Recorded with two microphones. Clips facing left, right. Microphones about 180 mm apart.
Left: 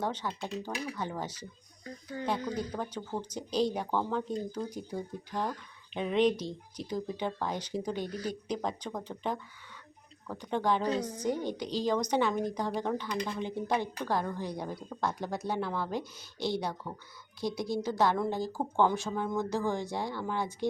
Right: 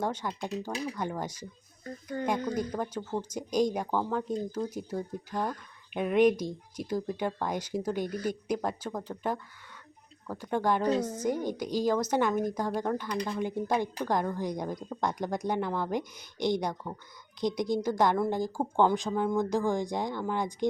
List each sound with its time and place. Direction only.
0.0 s speech: 10° right (ahead or behind)
2.1 s speech: 50° right (ahead or behind)
2.6 s speech: 10° right (ahead or behind)